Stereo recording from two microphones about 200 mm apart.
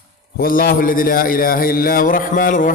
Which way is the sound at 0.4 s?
45° left (ahead or behind).